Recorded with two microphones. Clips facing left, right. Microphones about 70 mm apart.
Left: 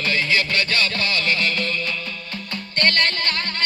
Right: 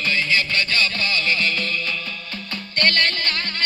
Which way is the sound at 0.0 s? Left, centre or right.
Left.